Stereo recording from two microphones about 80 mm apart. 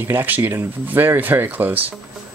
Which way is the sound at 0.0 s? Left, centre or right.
Right.